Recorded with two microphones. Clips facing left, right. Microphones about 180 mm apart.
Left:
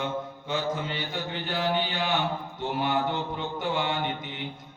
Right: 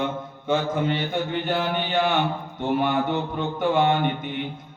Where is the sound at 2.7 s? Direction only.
55° right (ahead or behind).